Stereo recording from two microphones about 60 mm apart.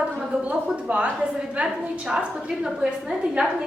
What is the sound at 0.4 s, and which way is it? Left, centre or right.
Speech, right.